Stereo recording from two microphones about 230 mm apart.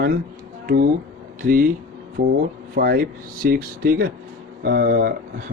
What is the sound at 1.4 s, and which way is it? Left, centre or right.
Speech, right.